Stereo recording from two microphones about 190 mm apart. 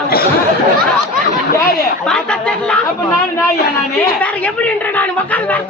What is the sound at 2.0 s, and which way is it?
Speech, 5° left (ahead or behind).